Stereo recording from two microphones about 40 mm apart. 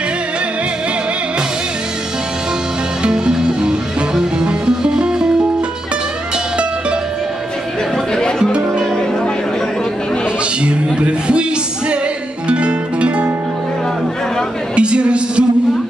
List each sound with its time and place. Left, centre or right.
3.0 s music: centre
8.1 s music: centre
8.5 s music: right
10.6 s music: right
12.4 s music: right
14.8 s a sound: right